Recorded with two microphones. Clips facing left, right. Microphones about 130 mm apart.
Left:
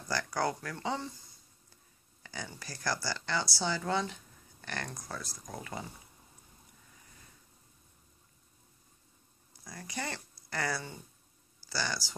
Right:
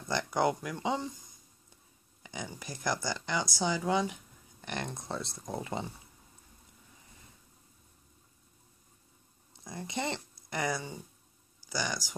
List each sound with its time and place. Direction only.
0.1 s speech: 20° right (ahead or behind)
2.2 s speech: 15° right (ahead or behind)
9.5 s speech: 20° right (ahead or behind)